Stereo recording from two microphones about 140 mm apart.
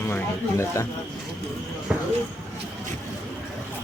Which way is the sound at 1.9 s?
5° right (ahead or behind).